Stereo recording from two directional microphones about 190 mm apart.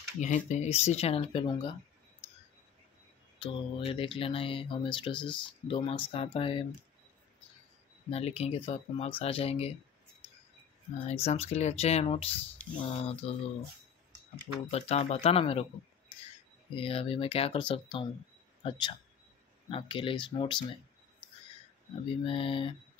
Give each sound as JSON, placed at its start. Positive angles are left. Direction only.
{"t": 0.2, "sound": "speech", "side_deg": 40}
{"t": 3.3, "sound": "speech", "side_deg": 30}
{"t": 8.1, "sound": "speech", "side_deg": 35}
{"t": 11.1, "sound": "speech", "side_deg": 30}
{"t": 14.7, "sound": "speech", "side_deg": 35}
{"t": 16.7, "sound": "speech", "side_deg": 30}
{"t": 22.0, "sound": "speech", "side_deg": 30}